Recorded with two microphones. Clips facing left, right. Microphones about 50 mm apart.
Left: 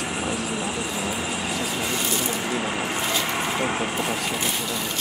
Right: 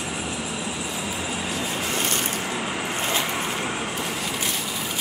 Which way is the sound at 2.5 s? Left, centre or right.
Centre.